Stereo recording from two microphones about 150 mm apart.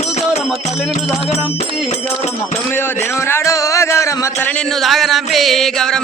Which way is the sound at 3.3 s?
20° left (ahead or behind).